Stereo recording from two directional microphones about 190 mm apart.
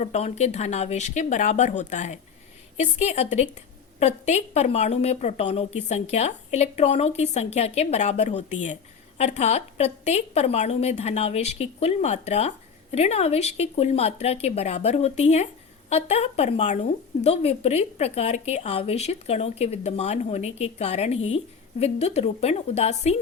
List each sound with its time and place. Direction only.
0.0 s a woman's voice: 35° left (ahead or behind)